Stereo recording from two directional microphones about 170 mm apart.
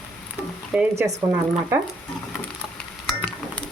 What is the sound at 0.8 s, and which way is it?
Speech, 15° right (ahead or behind).